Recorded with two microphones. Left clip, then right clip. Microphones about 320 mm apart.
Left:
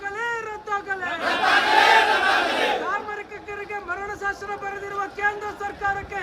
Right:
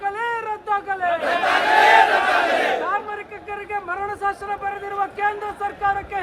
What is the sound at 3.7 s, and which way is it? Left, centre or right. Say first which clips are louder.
Speech: right 5 dB; centre.